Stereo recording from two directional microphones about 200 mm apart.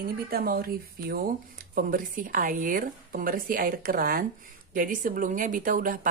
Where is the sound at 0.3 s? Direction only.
50° right (ahead or behind).